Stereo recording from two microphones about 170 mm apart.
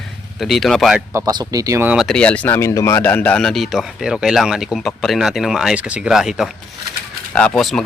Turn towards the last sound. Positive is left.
turn(degrees=0)  # may be behind; listen again after turning